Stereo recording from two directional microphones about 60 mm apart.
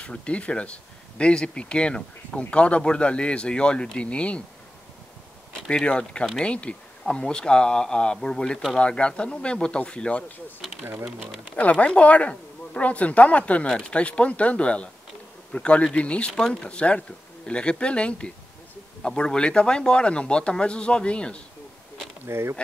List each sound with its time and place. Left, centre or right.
0.0 s speech: centre
5.7 s speech: centre
10.8 s speech: right
11.5 s speech: left
22.2 s speech: right